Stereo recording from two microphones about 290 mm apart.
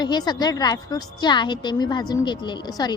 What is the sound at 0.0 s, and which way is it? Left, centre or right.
A woman's voice, centre.